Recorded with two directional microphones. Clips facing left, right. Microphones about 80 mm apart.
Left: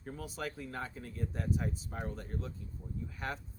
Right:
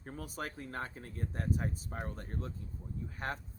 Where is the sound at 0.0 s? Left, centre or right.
Right.